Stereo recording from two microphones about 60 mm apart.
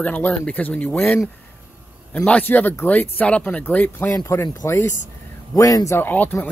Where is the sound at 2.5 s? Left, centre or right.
Left.